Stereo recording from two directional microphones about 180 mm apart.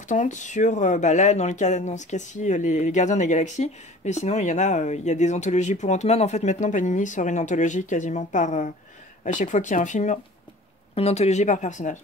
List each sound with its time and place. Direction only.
0.0 s speech: 45° left (ahead or behind)